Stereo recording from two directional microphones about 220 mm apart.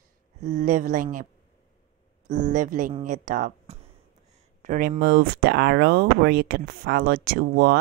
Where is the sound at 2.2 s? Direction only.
35° right (ahead or behind).